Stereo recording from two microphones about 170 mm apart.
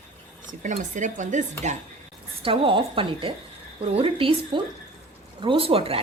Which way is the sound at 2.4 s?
30° right (ahead or behind).